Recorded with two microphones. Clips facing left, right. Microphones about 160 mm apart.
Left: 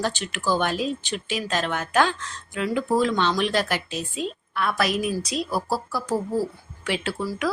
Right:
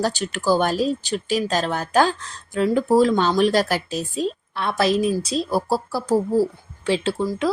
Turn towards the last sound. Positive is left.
turn(degrees=-30)  # may be behind; listen again after turning